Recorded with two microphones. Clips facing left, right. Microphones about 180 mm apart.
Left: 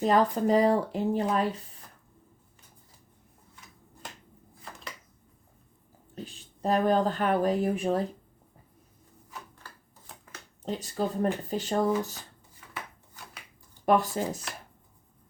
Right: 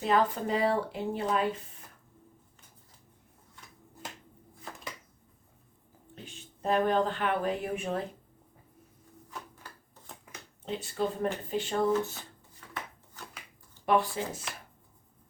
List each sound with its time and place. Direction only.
0.0 s speech: 40° left (ahead or behind)
4.7 s a sound: centre (ahead or behind)
6.1 s speech: 35° left (ahead or behind)
10.7 s speech: 40° left (ahead or behind)
12.5 s chopping: 10° left (ahead or behind)
13.8 s speech: 45° left (ahead or behind)